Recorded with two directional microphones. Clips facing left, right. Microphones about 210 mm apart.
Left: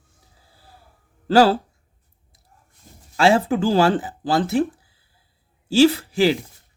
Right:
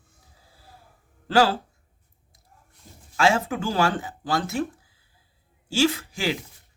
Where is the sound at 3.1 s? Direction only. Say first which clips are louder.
Left 5 dB; 35° left (ahead or behind).